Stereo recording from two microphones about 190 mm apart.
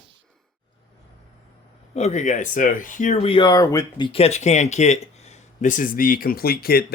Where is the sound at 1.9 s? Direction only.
35° left (ahead or behind).